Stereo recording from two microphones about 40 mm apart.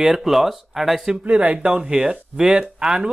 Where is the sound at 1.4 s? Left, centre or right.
Right.